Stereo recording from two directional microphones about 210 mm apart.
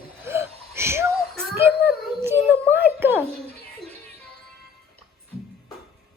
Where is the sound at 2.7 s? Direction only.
10° right (ahead or behind).